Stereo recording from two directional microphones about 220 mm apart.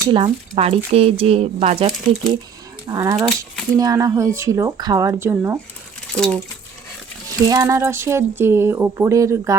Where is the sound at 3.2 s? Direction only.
5° left (ahead or behind).